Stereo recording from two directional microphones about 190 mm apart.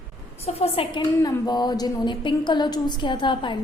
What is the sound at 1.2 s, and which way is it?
A woman's voice, 20° left (ahead or behind).